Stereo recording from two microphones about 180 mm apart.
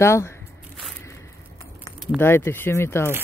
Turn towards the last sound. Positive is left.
turn(degrees=15)  # may be behind; listen again after turning